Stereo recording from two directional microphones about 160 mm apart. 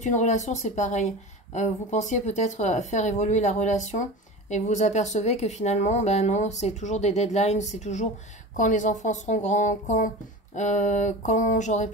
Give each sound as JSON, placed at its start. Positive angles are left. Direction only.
{"t": 0.0, "sound": "speech", "side_deg": 50}